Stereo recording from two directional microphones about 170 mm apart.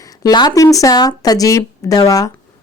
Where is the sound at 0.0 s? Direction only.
20° left (ahead or behind).